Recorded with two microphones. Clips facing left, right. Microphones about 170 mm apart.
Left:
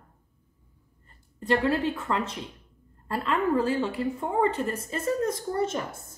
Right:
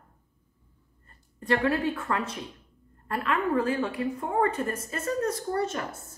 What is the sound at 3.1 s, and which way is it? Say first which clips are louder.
A woman's voice: left 1 dB; 30° left (ahead or behind).